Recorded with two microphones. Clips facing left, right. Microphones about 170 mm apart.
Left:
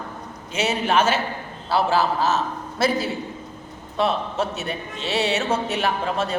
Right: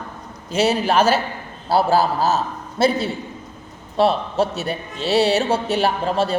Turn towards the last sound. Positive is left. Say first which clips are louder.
# right 4 dB
turn(degrees=-30)  # may be behind; listen again after turning